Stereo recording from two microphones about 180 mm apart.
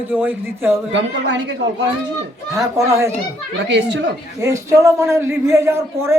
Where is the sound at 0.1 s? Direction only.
10° right (ahead or behind).